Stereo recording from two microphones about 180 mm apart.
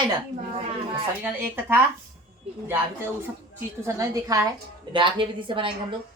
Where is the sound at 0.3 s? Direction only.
35° right (ahead or behind).